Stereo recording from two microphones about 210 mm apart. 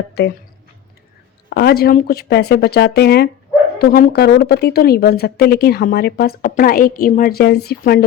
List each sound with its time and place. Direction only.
1.5 s speech: 50° left (ahead or behind)